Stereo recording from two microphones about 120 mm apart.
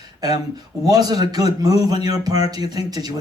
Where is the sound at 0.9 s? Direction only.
35° right (ahead or behind).